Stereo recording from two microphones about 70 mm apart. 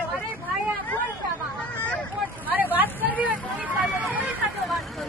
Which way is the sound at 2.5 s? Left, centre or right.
Right.